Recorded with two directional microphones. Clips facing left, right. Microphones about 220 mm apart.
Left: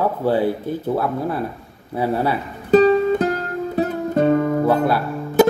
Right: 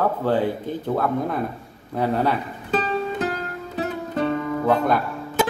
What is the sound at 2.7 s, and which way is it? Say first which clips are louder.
Music: left 11 dB; 45° left (ahead or behind).